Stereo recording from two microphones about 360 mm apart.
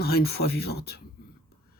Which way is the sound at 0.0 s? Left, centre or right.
Left.